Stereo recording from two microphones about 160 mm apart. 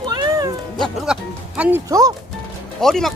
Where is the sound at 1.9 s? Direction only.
20° right (ahead or behind).